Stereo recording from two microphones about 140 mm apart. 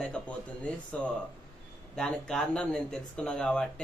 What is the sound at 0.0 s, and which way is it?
Speech, 5° left (ahead or behind).